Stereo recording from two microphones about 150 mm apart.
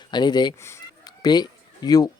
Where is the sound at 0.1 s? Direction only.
30° left (ahead or behind).